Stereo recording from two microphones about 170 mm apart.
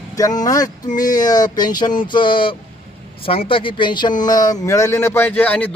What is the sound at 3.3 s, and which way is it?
Speech, 30° left (ahead or behind).